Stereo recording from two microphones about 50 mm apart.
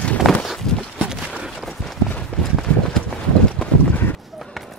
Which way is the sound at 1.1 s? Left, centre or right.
Centre.